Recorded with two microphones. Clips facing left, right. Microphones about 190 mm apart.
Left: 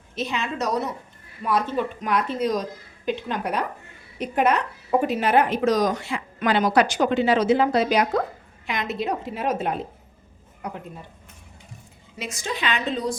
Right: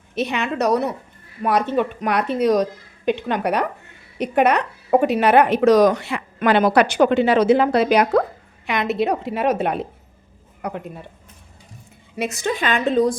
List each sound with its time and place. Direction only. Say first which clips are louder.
0.1 s a woman's voice: right 5 dB; 65° right (ahead or behind)
12.1 s a woman's voice: right 8 dB; 60° right (ahead or behind)